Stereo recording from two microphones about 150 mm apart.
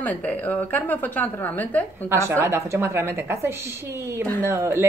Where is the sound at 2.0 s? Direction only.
15° right (ahead or behind).